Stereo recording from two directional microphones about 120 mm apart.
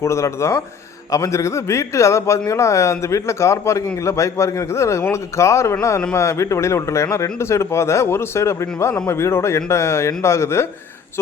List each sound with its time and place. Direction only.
0.0 s speech: 25° left (ahead or behind)